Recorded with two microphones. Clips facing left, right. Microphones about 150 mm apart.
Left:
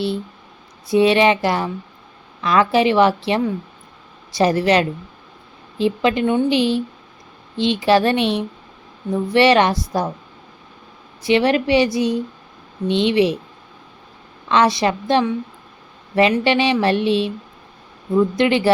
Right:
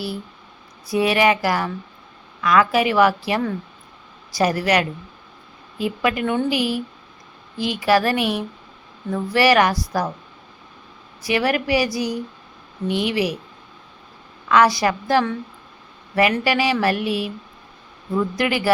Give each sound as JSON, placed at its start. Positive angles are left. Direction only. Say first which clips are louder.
{"t": 0.9, "sound": "a woman's voice", "louder": "left 4 dB", "side_deg": 25}
{"t": 11.2, "sound": "a woman's voice", "louder": "left 5 dB", "side_deg": 25}
{"t": 14.5, "sound": "a woman's voice", "louder": "even", "side_deg": 25}